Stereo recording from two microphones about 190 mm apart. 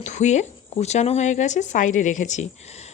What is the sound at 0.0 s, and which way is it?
Speech, 40° left (ahead or behind).